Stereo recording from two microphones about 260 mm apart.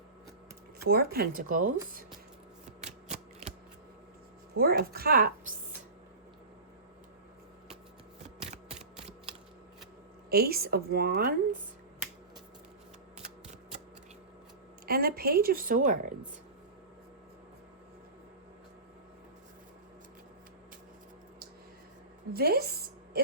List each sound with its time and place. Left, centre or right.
0.9 s a woman's voice: right
2.6 s typewriter: right
4.5 s a woman's voice: right
10.2 s a woman's voice: right
14.8 s a woman's voice: right
22.3 s music: right